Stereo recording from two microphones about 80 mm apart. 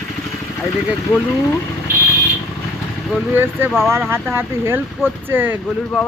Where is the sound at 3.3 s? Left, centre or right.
Right.